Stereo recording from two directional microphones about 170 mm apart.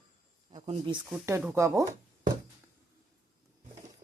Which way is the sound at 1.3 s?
15° right (ahead or behind).